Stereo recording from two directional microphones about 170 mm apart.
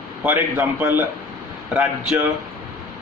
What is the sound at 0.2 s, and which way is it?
A man's voice, 10° right (ahead or behind).